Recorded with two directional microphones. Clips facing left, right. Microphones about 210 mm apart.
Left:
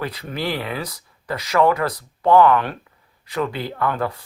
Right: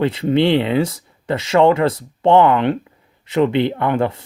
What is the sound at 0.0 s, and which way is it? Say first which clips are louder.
Speech: right 11 dB; 25° right (ahead or behind).